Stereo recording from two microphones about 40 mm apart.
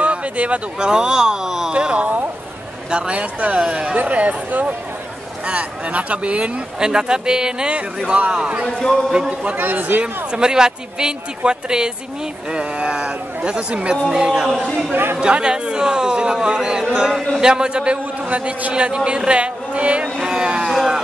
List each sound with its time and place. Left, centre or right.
0.0 s a sound: right
0.7 s speech: centre
1.7 s a man's voice: right
3.2 s speech: right
6.8 s speech: centre
8.1 s speech: right
8.7 s a man's voice: centre
9.6 s a man's voice: right
10.3 s a man's voice: centre
18.2 s a man's voice: right
20.2 s a sound: centre
20.6 s a sound: centre